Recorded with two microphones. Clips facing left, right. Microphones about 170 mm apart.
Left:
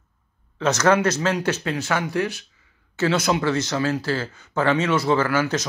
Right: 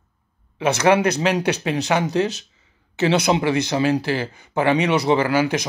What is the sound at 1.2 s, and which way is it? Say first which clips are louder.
Speech: right 3 dB; 15° right (ahead or behind).